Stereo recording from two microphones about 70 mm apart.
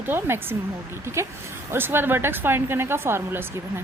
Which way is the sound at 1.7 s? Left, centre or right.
Right.